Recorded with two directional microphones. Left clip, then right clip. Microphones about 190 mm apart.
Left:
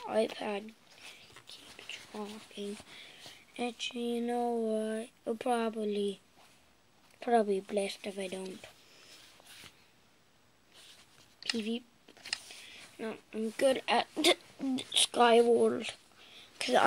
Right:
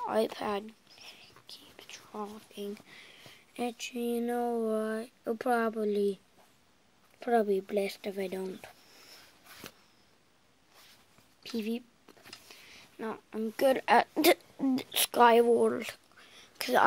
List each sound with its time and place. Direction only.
0.0 s speech: 10° right (ahead or behind)
1.2 s whispering: 5° right (ahead or behind)
3.5 s speech: 15° right (ahead or behind)
7.2 s speech: 10° right (ahead or behind)
12.6 s speech: 15° right (ahead or behind)